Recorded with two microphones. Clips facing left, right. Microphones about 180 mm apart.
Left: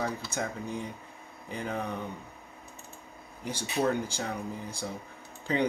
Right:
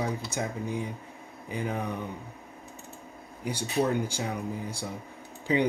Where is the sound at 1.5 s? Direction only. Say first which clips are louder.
Right 2 dB; 10° right (ahead or behind).